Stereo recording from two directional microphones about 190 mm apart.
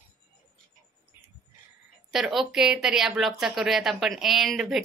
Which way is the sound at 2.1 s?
Centre (ahead or behind).